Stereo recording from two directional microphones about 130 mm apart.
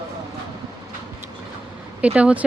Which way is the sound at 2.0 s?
10° right (ahead or behind).